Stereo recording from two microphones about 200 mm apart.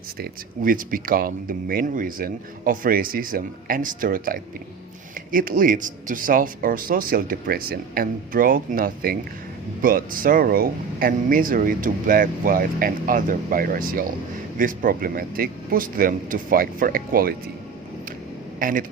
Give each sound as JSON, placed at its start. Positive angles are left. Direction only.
{"t": 0.2, "sound": "speech", "side_deg": -45}
{"t": 18.6, "sound": "speech", "side_deg": -45}